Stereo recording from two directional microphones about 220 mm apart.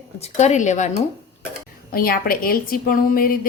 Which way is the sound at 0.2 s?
30° left (ahead or behind).